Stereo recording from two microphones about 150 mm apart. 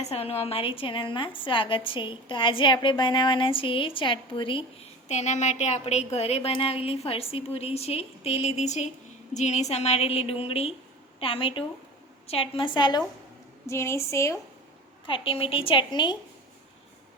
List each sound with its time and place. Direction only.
0.0 s a woman's voice: 45° left (ahead or behind)
5.0 s a woman's voice: 50° left (ahead or behind); by 13.1 s 30° left (ahead or behind)
13.7 s a woman's voice: 15° left (ahead or behind)
15.0 s a woman's voice: 35° left (ahead or behind)